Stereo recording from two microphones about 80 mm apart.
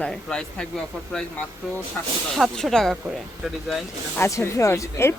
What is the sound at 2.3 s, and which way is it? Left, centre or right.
Speech, centre.